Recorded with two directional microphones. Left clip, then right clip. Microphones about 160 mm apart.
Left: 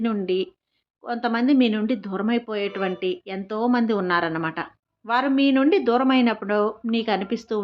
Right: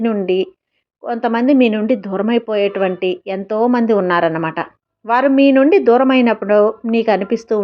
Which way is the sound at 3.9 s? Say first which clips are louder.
Right 8 dB; 20° right (ahead or behind).